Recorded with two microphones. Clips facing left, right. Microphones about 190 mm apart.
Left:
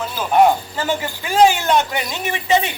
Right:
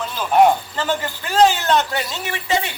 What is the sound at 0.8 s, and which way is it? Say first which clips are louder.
A man's voice: left 1 dB; 10° left (ahead or behind).